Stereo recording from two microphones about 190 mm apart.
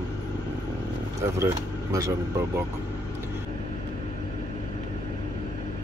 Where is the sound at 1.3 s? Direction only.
15° right (ahead or behind).